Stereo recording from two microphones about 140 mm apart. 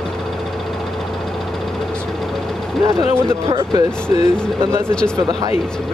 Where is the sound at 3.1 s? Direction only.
20° right (ahead or behind).